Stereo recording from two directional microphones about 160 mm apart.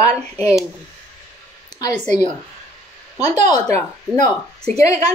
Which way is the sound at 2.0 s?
45° right (ahead or behind).